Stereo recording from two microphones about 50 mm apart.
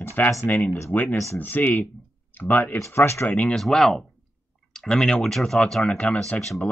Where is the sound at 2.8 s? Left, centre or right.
Left.